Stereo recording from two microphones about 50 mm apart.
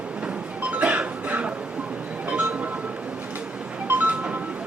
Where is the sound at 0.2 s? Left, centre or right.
Right.